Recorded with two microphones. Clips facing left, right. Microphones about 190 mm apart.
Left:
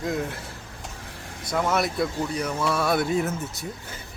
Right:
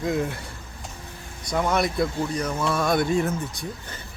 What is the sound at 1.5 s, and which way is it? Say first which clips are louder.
Speech: right 1 dB; 5° left (ahead or behind).